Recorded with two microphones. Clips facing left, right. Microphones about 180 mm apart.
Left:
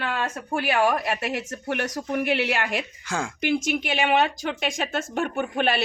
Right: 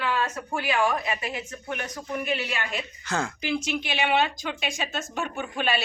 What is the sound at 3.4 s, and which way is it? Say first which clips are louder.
Speech: left 4 dB; 55° left (ahead or behind).